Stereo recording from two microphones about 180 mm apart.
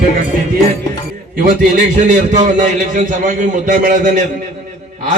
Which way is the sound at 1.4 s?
50° right (ahead or behind).